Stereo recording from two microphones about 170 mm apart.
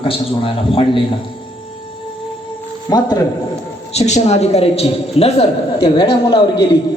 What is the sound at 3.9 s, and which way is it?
A man's voice, 40° left (ahead or behind).